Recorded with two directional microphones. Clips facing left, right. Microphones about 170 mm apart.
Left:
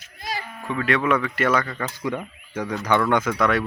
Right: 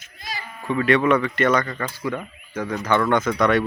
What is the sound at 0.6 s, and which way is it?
Speech, centre (ahead or behind).